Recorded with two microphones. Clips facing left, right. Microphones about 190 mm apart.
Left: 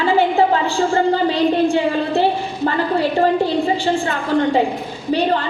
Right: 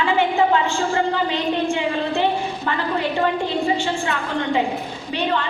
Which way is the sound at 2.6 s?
35° left (ahead or behind).